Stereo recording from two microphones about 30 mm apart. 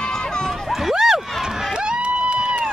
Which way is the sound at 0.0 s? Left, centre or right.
Left.